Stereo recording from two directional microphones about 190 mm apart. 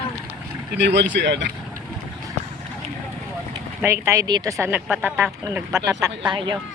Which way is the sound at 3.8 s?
15° right (ahead or behind).